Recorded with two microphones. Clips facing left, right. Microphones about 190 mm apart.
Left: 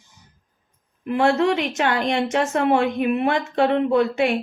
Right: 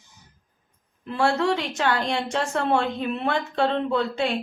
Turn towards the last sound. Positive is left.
turn(degrees=15)  # may be behind; listen again after turning